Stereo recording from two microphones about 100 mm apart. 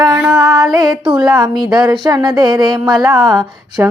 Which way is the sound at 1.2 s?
40° right (ahead or behind).